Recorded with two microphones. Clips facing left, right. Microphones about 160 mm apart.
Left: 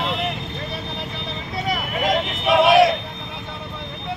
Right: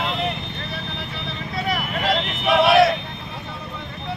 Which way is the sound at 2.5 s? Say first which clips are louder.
Left 1 dB; 15° left (ahead or behind).